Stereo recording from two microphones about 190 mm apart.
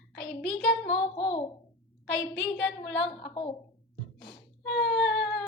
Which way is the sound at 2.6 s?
65° left (ahead or behind).